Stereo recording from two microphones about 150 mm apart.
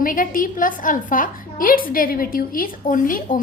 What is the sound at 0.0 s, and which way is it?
A woman's voice, 65° left (ahead or behind).